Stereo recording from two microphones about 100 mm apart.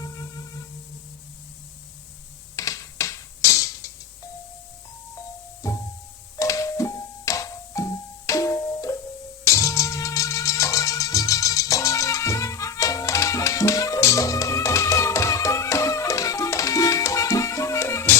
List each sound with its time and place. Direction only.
2.6 s mechanisms: 35° left (ahead or behind)
5.6 s music: 35° left (ahead or behind)